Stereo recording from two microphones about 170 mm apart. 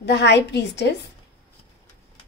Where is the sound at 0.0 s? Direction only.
90° left.